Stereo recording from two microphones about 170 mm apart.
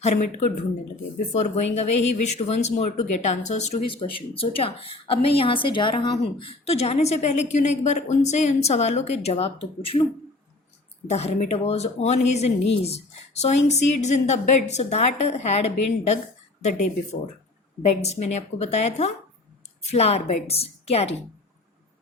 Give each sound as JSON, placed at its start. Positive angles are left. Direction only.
{"t": 0.0, "sound": "a woman's voice", "side_deg": 45}
{"t": 3.8, "sound": "a woman's voice", "side_deg": 30}
{"t": 11.1, "sound": "a woman's voice", "side_deg": 40}